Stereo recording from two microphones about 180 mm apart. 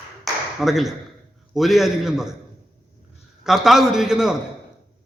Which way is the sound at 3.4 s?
Centre (ahead or behind).